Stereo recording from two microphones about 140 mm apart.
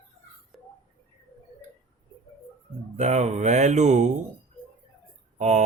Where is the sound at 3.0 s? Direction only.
55° right (ahead or behind).